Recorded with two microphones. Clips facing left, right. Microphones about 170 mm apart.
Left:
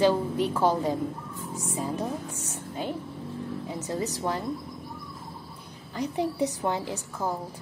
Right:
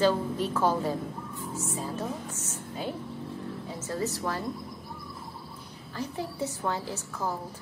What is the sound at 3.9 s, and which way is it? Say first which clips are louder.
Speech: left 1 dB; 20° left (ahead or behind).